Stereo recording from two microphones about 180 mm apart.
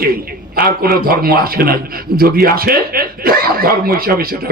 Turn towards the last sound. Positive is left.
turn(degrees=-55)  # may be behind; listen again after turning